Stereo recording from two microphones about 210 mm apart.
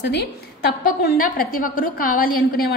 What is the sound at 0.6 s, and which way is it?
A woman's voice, 45° left (ahead or behind).